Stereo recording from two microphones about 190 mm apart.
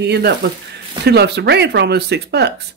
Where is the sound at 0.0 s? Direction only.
60° right (ahead or behind).